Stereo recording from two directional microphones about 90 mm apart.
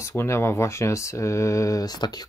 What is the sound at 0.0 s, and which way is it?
Speech, 30° left (ahead or behind).